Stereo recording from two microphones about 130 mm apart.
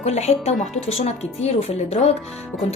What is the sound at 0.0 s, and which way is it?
A woman's voice, 55° left (ahead or behind).